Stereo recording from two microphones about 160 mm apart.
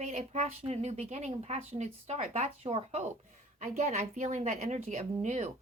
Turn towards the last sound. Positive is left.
turn(degrees=-45)  # may be behind; listen again after turning